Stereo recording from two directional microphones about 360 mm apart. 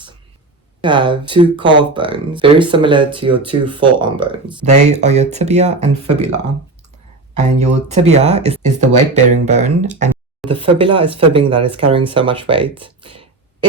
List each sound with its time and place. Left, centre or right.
0.8 s speech: centre
7.3 s speech: centre